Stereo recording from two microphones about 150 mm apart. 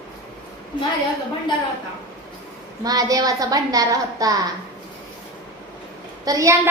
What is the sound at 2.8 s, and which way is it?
A woman's voice, 25° right (ahead or behind).